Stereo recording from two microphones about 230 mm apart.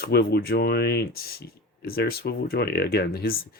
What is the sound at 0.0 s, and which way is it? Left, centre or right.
Speech, left.